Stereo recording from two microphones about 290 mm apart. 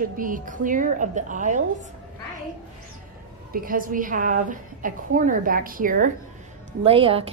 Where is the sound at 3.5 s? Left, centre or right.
Right.